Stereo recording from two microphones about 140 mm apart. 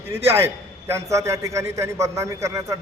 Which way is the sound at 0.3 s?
15° right (ahead or behind).